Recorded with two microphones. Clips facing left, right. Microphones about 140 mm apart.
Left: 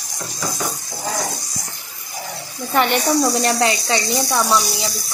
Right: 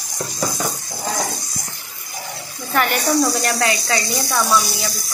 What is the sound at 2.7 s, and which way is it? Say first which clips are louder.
Speech: left 1 dB; 25° left (ahead or behind).